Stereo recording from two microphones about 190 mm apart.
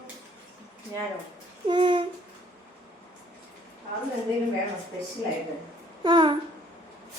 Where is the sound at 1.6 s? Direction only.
25° right (ahead or behind).